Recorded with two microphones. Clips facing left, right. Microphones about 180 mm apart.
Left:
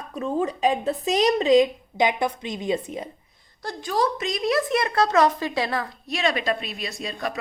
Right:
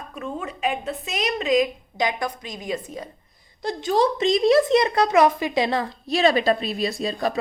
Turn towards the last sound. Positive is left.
turn(degrees=-35)  # may be behind; listen again after turning